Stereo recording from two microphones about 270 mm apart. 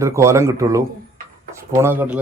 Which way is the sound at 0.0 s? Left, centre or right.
Centre.